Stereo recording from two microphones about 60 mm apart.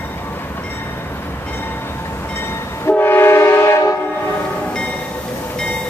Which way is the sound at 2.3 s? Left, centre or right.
Left.